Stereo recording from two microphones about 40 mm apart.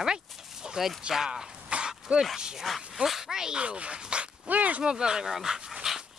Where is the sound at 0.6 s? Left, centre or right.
Right.